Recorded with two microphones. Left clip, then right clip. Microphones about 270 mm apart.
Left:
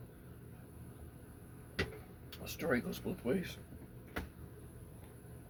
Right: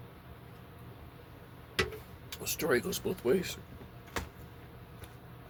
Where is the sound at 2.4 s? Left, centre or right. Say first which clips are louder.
Right 6 dB; right.